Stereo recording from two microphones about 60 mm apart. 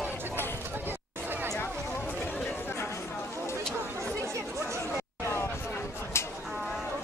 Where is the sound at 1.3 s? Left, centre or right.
Right.